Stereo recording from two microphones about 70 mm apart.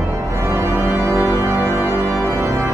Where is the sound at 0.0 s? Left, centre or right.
Right.